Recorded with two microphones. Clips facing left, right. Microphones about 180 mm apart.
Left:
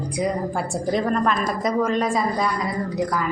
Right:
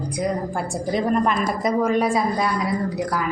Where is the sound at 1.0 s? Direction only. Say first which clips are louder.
Right 2 dB; 20° right (ahead or behind).